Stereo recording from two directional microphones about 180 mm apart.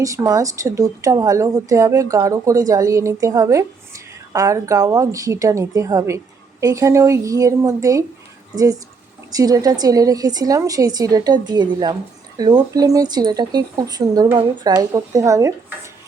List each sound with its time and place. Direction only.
0.0 s a woman's voice: 20° right (ahead or behind)